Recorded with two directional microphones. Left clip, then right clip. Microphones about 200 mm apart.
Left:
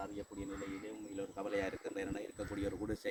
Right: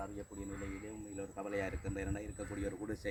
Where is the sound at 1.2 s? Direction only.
15° right (ahead or behind).